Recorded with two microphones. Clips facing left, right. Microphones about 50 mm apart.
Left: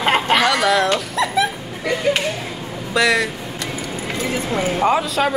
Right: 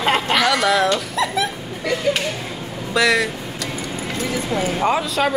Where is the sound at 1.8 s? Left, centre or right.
Centre.